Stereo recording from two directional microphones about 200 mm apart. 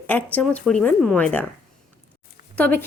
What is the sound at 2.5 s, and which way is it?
Speech, 10° left (ahead or behind).